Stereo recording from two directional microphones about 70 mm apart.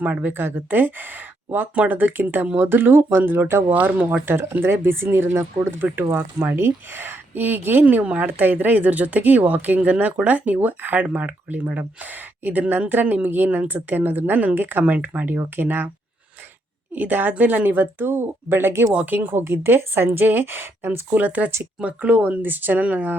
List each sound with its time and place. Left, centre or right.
0.0 s speech: right
3.7 s speech: right
4.5 s speech: right
16.9 s speech: right